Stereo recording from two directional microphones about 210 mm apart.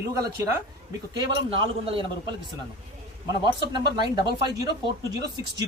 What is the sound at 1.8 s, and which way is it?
Speech, 25° right (ahead or behind).